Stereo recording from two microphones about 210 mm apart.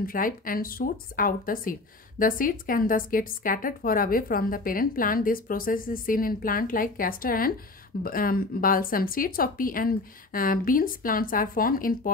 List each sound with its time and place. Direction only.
0.0 s speech: 40° left (ahead or behind)